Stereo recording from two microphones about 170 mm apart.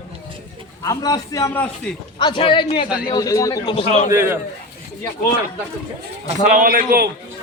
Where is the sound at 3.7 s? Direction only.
45° left (ahead or behind).